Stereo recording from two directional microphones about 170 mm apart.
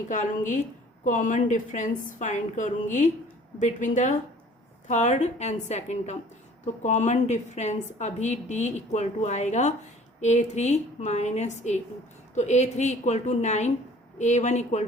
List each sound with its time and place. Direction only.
0.1 s a woman's voice: 45° left (ahead or behind)